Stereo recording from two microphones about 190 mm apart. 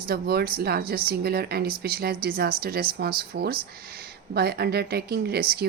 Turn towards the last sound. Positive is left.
turn(degrees=-55)  # may be behind; listen again after turning